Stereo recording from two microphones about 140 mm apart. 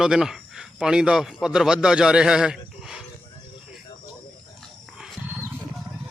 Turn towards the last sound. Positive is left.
turn(degrees=-5)  # may be behind; listen again after turning